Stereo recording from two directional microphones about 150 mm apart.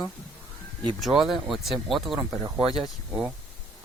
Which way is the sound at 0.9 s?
Centre (ahead or behind).